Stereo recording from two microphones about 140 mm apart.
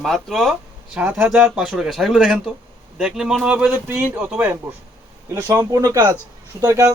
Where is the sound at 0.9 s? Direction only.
10° right (ahead or behind).